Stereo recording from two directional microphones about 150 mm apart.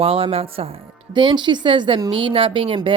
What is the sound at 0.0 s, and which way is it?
A woman's voice, 40° right (ahead or behind).